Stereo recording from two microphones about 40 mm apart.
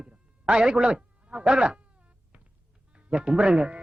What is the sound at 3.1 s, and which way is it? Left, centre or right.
Speech, right.